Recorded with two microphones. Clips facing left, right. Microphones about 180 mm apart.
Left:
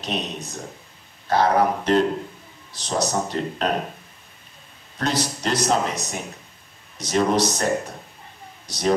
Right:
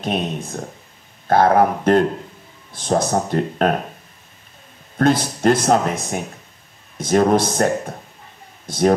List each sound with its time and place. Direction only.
0.0 s speech: 50° right (ahead or behind)
4.9 s speech: 50° right (ahead or behind)